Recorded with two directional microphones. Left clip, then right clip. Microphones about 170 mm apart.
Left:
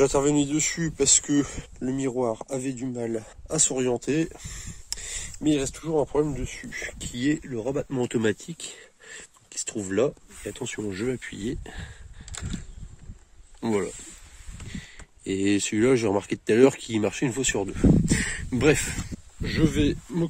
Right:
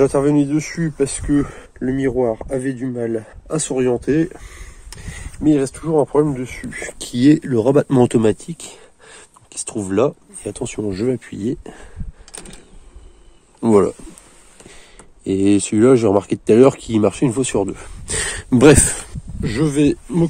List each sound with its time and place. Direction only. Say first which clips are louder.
0.0 s speech: right 7 dB; 15° left (ahead or behind)
0.9 s speech: right 4 dB; 25° left (ahead or behind)
4.8 s a sound: left 2 dB; 25° left (ahead or behind)
5.5 s speech: right 9 dB; 10° left (ahead or behind)
7.0 s speech: right 14 dB; 35° right (ahead or behind)
7.5 s speech: right 14 dB; 55° right (ahead or behind)
8.2 s speech: right 9 dB; centre (ahead or behind)
14.7 s speech: left 2 dB; centre (ahead or behind)
18.0 s speech: right 3 dB; 10° right (ahead or behind)
18.3 s speech: right 13 dB; 25° right (ahead or behind)
19.4 s speech: right 7 dB; 5° right (ahead or behind)